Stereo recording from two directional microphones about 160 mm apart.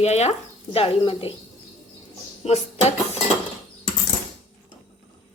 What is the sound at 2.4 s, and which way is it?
Speech, 40° left (ahead or behind).